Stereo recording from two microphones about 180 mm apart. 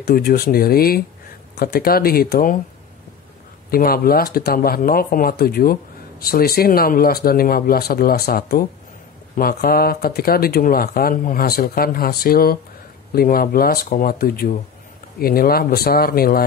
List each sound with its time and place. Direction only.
0.0 s speech: 55° left (ahead or behind)
3.7 s speech: 55° left (ahead or behind)